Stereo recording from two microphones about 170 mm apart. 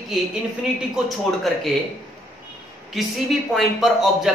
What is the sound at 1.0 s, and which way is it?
Speech, centre (ahead or behind).